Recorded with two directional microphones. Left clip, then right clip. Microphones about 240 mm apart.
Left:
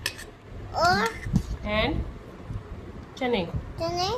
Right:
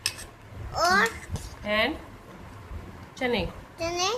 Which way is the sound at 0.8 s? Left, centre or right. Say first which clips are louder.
Even; centre.